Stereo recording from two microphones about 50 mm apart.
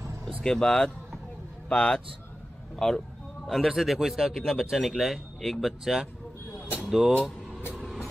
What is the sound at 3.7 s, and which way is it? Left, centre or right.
Speech, centre.